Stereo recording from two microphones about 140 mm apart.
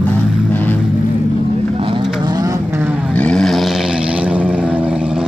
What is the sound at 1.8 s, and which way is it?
Vehicle, 35° right (ahead or behind).